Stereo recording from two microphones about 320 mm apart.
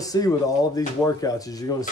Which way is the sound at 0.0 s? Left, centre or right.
Centre.